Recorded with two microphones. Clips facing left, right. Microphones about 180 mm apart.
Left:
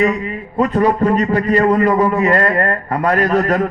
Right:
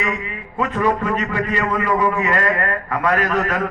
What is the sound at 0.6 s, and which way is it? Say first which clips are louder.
A man's voice: left 6 dB; 35° left (ahead or behind).